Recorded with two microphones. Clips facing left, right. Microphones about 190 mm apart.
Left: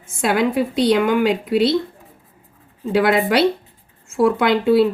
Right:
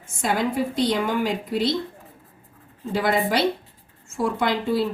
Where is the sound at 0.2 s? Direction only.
80° left.